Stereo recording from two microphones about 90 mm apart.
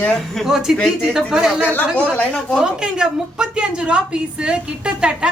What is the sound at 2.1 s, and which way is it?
Speech, 10° left (ahead or behind).